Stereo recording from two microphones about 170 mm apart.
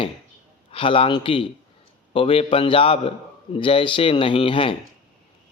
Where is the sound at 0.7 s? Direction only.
30° left (ahead or behind).